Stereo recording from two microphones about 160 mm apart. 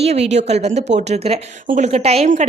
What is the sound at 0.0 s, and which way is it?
A woman's voice, 40° right (ahead or behind).